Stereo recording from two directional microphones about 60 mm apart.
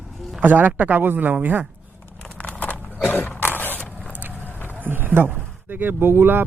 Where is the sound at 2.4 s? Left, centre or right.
Left.